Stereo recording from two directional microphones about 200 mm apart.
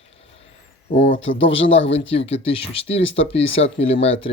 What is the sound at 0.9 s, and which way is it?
Speech, 30° left (ahead or behind).